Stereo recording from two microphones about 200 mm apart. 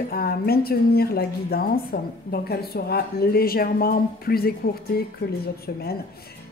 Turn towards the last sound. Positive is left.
turn(degrees=50)  # may be behind; listen again after turning